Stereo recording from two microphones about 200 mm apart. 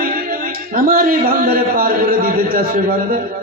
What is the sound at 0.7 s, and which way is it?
A man's voice, 45° right (ahead or behind).